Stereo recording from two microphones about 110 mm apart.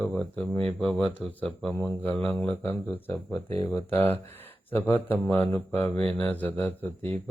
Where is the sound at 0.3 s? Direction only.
15° left (ahead or behind).